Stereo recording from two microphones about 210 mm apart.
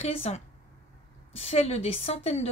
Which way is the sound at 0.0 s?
30° left (ahead or behind).